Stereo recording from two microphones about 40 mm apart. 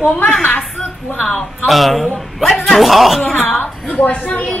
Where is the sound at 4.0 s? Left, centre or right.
Left.